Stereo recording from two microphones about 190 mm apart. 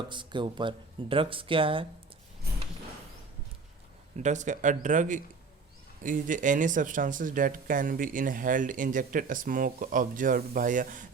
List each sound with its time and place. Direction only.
0.1 s speech: 25° right (ahead or behind)
4.2 s speech: 40° right (ahead or behind)